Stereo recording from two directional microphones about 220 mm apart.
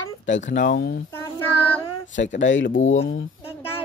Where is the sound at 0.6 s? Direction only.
40° left (ahead or behind).